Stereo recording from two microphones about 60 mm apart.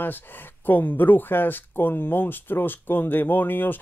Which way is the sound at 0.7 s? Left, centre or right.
Left.